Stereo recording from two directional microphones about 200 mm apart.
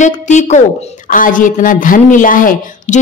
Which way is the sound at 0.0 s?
35° left (ahead or behind).